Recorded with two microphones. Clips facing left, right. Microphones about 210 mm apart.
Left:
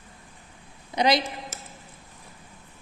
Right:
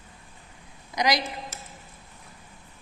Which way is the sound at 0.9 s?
30° left (ahead or behind).